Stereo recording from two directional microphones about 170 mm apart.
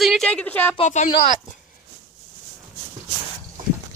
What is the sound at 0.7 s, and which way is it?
Speech, 45° left (ahead or behind).